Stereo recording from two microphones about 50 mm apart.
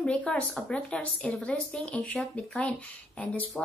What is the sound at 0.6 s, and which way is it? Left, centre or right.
A woman's voice, left.